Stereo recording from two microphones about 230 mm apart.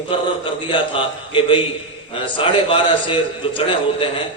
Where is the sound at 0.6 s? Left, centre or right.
Left.